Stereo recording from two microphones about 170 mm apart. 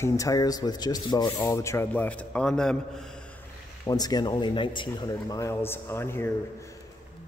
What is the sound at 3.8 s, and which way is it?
Speech, 20° left (ahead or behind).